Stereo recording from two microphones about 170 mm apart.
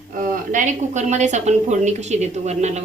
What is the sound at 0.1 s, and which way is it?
Speech, 50° right (ahead or behind).